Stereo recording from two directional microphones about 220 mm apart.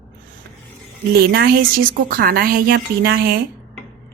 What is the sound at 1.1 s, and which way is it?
A woman's voice, 45° right (ahead or behind).